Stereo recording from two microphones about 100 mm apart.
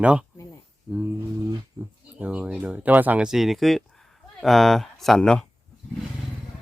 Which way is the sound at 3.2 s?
Centre (ahead or behind).